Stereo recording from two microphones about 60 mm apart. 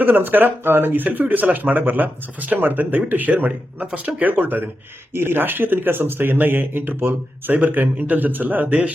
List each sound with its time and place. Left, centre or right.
0.0 s speech: right